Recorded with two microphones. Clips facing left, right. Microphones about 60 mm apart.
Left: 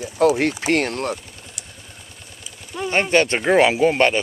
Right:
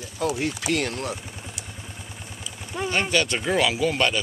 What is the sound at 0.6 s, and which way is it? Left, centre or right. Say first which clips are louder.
Speech: left 5 dB; left.